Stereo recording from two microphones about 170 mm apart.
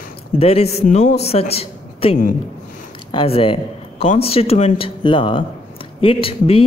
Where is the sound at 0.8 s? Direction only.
55° left (ahead or behind).